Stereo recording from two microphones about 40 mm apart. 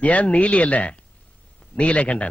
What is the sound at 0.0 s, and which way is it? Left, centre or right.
A man's voice, left.